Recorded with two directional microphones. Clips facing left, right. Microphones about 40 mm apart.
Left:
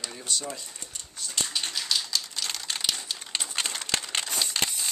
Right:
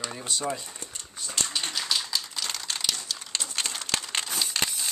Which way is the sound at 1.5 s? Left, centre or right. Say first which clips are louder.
Right 1 dB; centre.